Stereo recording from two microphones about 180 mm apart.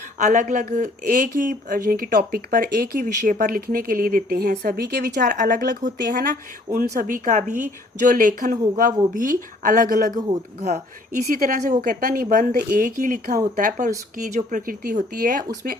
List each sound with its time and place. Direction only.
0.2 s speech: 40° right (ahead or behind); by 5.1 s 65° right (ahead or behind)
5.1 s speech: 45° right (ahead or behind)
7.3 s speech: 40° right (ahead or behind)
10.2 s speech: 20° right (ahead or behind)
11.3 s speech: 50° right (ahead or behind)